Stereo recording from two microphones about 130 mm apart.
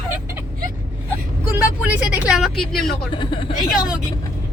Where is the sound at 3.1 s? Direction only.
40° left (ahead or behind).